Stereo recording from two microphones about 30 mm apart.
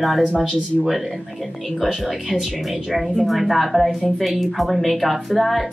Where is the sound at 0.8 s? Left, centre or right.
Centre.